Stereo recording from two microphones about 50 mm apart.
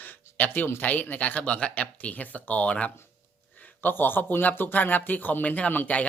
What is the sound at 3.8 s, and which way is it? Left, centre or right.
Speech, left.